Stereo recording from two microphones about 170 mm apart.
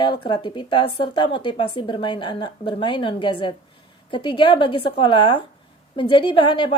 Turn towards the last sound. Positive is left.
turn(degrees=30)  # may be behind; listen again after turning